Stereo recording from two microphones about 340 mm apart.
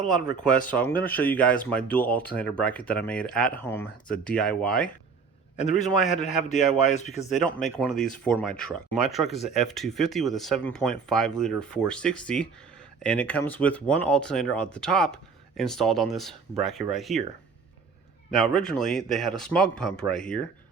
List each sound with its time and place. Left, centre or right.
0.7 s speech: centre
6.1 s a man's voice: left
7.3 s speech: centre
18.3 s speech: centre